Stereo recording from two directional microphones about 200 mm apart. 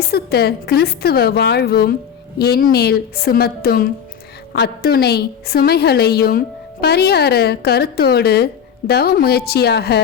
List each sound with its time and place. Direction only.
0.1 s a woman's voice: 50° left (ahead or behind)